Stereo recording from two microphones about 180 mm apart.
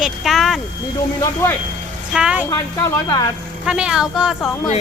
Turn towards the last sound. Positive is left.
turn(degrees=-5)  # may be behind; listen again after turning